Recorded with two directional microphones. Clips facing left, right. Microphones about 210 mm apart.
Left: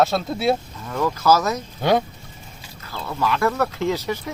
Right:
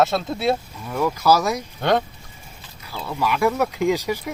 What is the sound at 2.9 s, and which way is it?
Speech, 10° right (ahead or behind).